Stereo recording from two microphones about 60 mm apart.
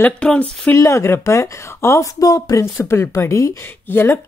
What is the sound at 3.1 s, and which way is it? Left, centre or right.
Speech, left.